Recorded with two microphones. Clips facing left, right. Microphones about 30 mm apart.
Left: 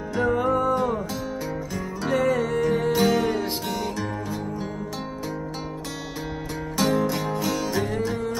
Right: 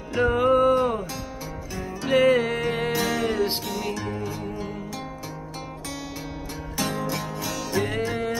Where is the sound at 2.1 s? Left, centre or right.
Right.